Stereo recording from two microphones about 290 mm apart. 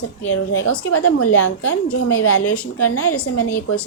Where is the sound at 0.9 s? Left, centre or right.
Left.